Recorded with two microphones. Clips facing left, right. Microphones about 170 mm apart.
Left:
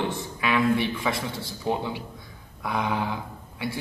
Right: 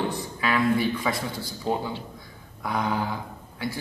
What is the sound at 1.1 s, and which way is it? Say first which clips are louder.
Speech: even; 25° left (ahead or behind).